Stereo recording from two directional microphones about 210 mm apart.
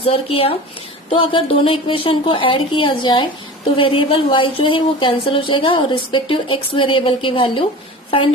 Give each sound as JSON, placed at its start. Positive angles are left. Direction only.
{"t": 0.0, "sound": "a woman's voice", "side_deg": 25}